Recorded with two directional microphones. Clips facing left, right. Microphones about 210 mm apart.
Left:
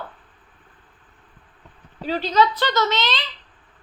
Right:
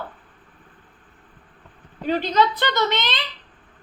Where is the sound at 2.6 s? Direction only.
55° right (ahead or behind).